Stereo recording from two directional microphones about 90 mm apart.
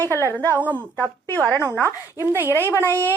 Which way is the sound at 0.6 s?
20° right (ahead or behind).